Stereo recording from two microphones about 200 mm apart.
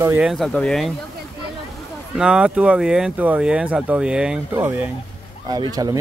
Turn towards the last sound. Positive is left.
turn(degrees=-20)  # may be behind; listen again after turning